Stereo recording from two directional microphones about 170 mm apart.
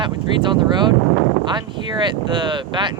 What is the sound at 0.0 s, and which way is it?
Speech, 25° right (ahead or behind).